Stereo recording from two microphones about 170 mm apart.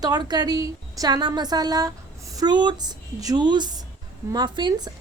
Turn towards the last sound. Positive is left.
turn(degrees=-25)  # may be behind; listen again after turning